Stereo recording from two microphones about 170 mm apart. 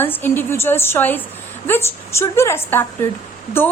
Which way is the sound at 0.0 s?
10° left (ahead or behind).